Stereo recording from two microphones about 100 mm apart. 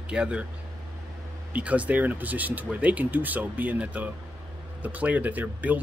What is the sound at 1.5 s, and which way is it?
Speech, 15° right (ahead or behind).